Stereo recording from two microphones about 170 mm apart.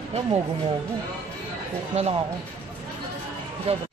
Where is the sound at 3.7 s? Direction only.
35° right (ahead or behind).